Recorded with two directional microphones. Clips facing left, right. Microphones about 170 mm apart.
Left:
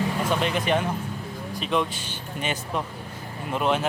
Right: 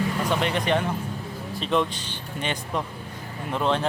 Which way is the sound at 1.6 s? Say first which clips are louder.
Right 2 dB; 5° left (ahead or behind).